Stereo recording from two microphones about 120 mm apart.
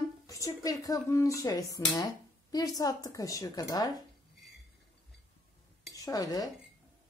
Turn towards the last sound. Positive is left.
turn(degrees=30)  # may be behind; listen again after turning